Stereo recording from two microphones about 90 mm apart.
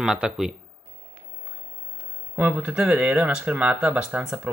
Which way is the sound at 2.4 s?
15° right (ahead or behind).